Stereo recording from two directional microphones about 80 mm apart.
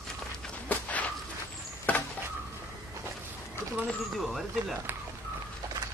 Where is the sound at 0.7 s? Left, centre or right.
Centre.